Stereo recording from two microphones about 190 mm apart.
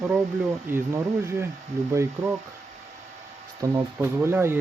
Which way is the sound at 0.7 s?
15° right (ahead or behind).